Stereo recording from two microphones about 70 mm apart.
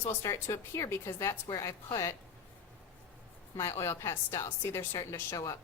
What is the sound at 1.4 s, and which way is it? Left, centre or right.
Speech, left.